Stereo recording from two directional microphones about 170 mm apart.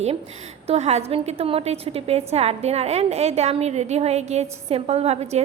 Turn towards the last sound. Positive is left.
turn(degrees=-40)  # may be behind; listen again after turning